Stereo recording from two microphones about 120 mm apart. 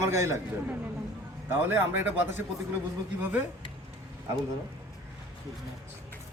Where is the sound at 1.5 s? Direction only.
15° right (ahead or behind).